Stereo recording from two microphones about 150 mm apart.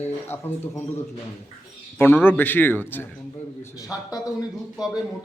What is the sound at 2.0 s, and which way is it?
A man's voice, 15° left (ahead or behind).